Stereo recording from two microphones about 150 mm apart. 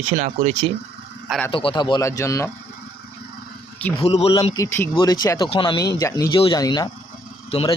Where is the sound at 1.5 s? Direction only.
35° left (ahead or behind).